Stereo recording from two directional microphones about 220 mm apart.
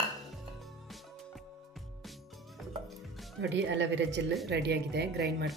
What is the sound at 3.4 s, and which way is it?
Speech, 55° right (ahead or behind).